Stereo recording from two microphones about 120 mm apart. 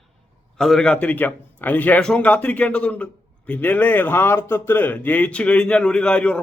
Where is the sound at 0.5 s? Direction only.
5° left (ahead or behind).